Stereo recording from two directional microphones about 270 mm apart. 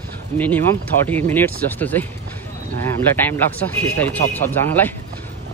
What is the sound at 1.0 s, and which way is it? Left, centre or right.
Speech, centre.